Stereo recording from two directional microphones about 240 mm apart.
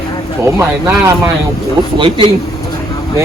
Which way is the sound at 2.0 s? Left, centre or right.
Centre.